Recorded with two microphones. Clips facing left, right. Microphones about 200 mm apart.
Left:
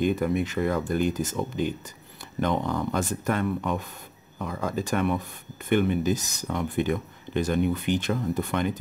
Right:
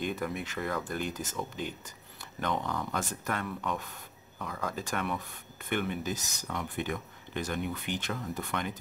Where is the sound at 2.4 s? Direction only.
25° left (ahead or behind).